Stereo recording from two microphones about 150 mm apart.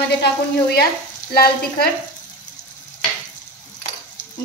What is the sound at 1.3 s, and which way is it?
Frying, 90° left.